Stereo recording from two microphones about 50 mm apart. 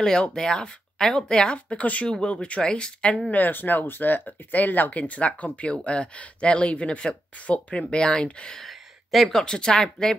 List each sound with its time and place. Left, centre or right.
0.0 s speech: centre
3.3 s speech: left; by 8.5 s centre
8.5 s speech: centre